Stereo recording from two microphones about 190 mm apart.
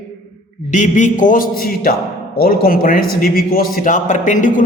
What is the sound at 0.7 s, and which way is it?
A man's voice, 40° left (ahead or behind).